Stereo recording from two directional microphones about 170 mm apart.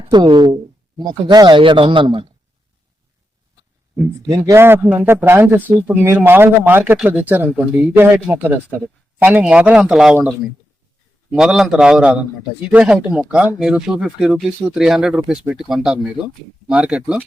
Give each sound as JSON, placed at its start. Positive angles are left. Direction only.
{"t": 0.1, "sound": "a man's voice", "side_deg": -25}
{"t": 4.3, "sound": "speech", "side_deg": -15}
{"t": 11.3, "sound": "speech", "side_deg": 0}